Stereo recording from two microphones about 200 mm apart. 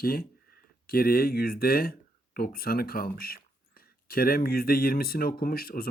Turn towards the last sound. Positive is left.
turn(degrees=50)  # may be behind; listen again after turning